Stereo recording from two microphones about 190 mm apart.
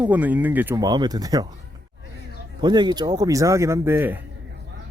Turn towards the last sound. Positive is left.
turn(degrees=-10)  # may be behind; listen again after turning